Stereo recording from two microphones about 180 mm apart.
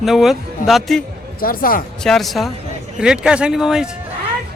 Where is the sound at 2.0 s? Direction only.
Centre (ahead or behind).